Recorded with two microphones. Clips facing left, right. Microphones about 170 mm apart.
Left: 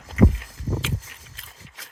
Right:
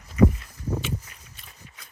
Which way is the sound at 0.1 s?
90° left.